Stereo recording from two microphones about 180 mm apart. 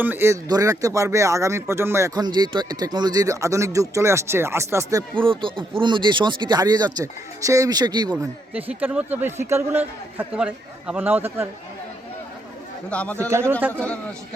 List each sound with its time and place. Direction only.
0.0 s speech: 10° right (ahead or behind)
8.2 s speech: 10° right (ahead or behind)
12.9 s speech: 5° left (ahead or behind)
13.5 s speech: 10° right (ahead or behind)
13.7 s speech: 5° left (ahead or behind)